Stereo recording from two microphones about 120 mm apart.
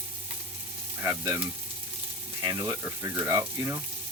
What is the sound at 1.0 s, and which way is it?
Speech, 25° right (ahead or behind).